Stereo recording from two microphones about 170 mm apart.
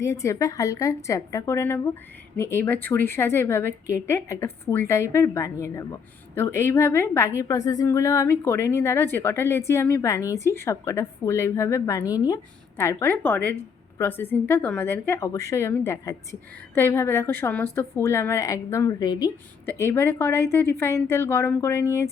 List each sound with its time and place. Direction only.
0.0 s a woman's voice: 20° left (ahead or behind)